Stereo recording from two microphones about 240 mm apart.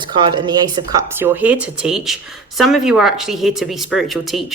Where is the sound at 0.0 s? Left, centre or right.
Centre.